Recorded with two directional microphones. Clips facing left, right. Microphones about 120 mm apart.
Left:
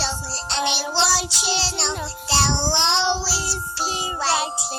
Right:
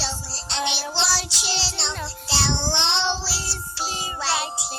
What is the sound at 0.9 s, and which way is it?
Child singing, 45° left (ahead or behind).